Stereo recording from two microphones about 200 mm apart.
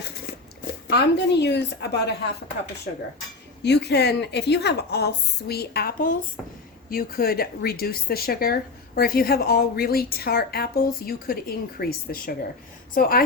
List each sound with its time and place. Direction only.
0.9 s a woman's voice: 55° left (ahead or behind)
3.6 s a woman's voice: 55° left (ahead or behind)